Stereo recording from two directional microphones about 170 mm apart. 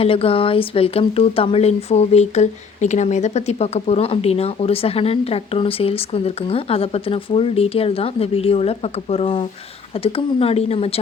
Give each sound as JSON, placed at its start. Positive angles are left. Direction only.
{"t": 0.0, "sound": "speech", "side_deg": 35}